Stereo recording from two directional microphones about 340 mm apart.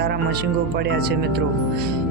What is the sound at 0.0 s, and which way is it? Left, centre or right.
Speech, right.